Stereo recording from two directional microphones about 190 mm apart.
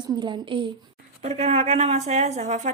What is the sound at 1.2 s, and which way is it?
A woman's voice, 35° right (ahead or behind).